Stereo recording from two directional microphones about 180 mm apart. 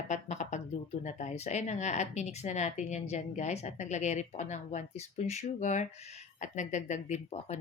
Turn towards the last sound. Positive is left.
turn(degrees=35)  # may be behind; listen again after turning